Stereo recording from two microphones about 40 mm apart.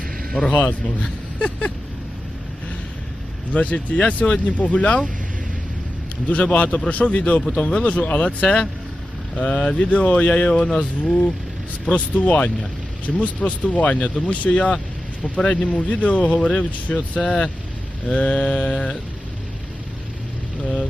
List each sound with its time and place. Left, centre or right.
0.5 s speech: left
3.5 s speech: left
6.2 s speech: left